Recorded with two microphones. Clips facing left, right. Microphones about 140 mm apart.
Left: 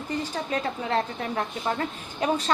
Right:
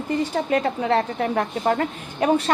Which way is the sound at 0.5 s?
65° right (ahead or behind).